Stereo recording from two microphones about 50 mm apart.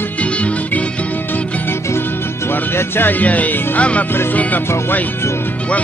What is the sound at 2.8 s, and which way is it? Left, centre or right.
Speech, left.